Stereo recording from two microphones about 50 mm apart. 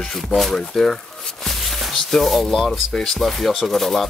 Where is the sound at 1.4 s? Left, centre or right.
Centre.